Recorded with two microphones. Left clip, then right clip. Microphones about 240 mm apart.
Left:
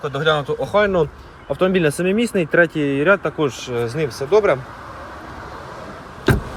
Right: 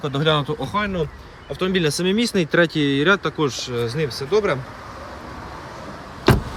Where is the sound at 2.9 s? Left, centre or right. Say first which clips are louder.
Left 3 dB; centre.